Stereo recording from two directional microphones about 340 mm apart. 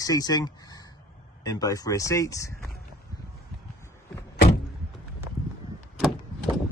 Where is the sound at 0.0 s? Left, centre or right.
Centre.